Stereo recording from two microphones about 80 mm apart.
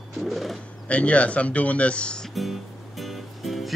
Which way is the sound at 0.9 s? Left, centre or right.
Centre.